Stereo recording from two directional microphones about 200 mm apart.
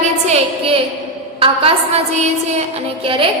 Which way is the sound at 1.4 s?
30° right (ahead or behind).